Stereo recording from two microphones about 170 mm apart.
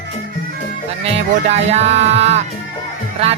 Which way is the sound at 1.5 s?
40° right (ahead or behind).